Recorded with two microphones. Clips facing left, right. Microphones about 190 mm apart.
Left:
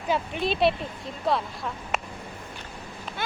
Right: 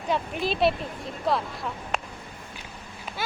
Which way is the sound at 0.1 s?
Centre (ahead or behind).